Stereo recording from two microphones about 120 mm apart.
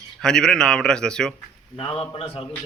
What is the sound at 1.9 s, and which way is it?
Speech, 50° left (ahead or behind).